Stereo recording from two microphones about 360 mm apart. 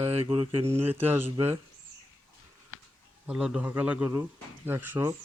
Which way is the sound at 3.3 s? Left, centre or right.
Centre.